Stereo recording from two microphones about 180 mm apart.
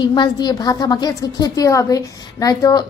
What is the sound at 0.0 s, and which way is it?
A woman's voice, 25° left (ahead or behind).